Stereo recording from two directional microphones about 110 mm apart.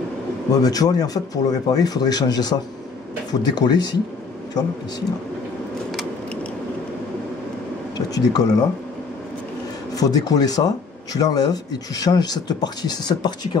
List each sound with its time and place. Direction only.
0.5 s speech: 35° left (ahead or behind)
8.1 s speech: 35° left (ahead or behind)
9.9 s speech: 35° left (ahead or behind)